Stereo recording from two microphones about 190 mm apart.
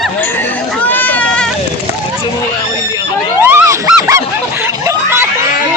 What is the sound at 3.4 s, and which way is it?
Dog, 15° right (ahead or behind).